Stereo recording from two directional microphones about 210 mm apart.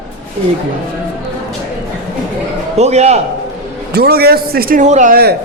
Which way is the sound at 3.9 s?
50° right (ahead or behind).